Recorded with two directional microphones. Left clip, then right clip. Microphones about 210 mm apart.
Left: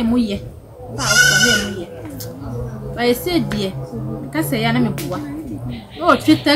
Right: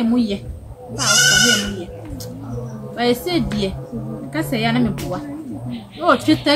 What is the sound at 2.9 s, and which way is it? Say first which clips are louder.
A woman's voice: left 1 dB; 10° left (ahead or behind).